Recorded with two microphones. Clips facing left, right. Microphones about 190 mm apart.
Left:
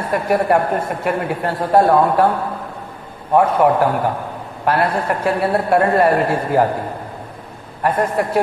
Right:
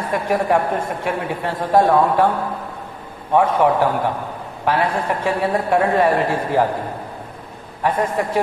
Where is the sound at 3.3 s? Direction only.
10° left (ahead or behind).